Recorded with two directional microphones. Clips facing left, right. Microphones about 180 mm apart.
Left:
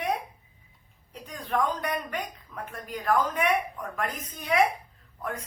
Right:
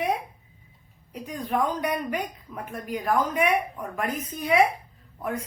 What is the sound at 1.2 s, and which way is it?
Speech, 10° right (ahead or behind).